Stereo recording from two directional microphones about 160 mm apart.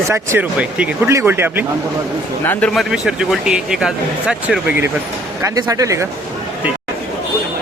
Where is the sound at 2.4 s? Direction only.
10° left (ahead or behind).